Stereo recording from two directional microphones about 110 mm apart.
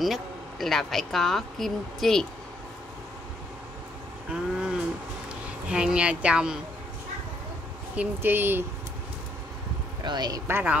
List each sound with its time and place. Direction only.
0.0 s speech: centre (ahead or behind)
4.3 s speech: 10° right (ahead or behind)
7.9 s speech: 15° right (ahead or behind)
10.0 s speech: 40° right (ahead or behind)
10.4 s speech: 15° right (ahead or behind)